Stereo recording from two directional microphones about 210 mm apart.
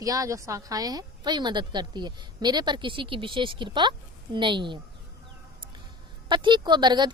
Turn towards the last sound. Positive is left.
turn(degrees=-20)  # may be behind; listen again after turning